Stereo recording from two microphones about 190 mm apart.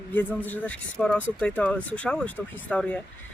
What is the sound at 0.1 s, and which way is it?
Speech, 10° left (ahead or behind).